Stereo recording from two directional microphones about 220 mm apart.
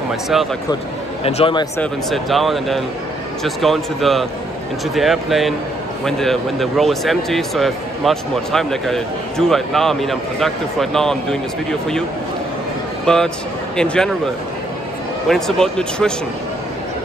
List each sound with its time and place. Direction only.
1.2 s a man's voice: 20° left (ahead or behind)
1.8 s a man's voice: centre (ahead or behind)
13.0 s a man's voice: 5° left (ahead or behind)